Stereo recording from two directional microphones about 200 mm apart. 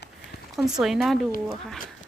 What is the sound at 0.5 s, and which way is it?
Speech, centre (ahead or behind).